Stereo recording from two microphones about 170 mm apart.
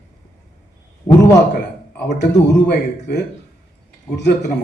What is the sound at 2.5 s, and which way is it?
Speech, 85° left.